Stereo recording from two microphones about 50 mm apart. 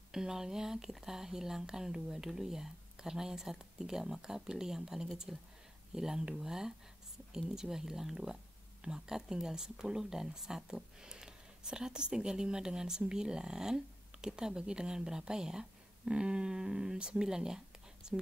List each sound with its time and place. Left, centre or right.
0.1 s speech: centre